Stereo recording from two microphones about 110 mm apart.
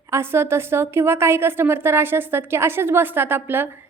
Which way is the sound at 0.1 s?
20° right (ahead or behind).